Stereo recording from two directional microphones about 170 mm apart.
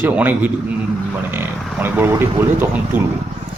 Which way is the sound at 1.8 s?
10° right (ahead or behind).